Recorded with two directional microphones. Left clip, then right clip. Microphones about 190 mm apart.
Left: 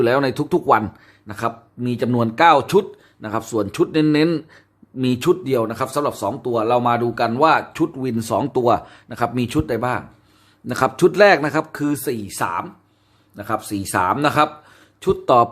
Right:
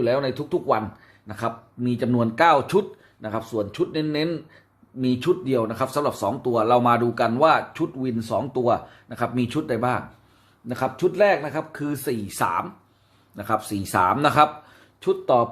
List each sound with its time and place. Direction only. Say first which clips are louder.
0.0 s a man's voice: left 5 dB; 40° left (ahead or behind)
1.3 s speech: left 4 dB; 25° left (ahead or behind)
3.5 s a man's voice: left 7 dB; 40° left (ahead or behind); by 10.0 s 20° left (ahead or behind)
10.7 s a man's voice: left 7 dB; 40° left (ahead or behind)
11.8 s speech: left 5 dB; 20° left (ahead or behind)
15.0 s speech: left 5 dB; 30° left (ahead or behind)